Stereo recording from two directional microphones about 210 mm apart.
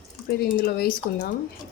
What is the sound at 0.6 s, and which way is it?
Speech, 45° left (ahead or behind).